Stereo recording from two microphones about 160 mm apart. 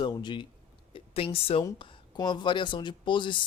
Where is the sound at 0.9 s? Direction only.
35° left (ahead or behind).